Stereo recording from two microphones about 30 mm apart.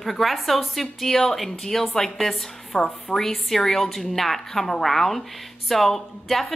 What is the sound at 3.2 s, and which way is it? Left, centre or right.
A woman's voice, centre.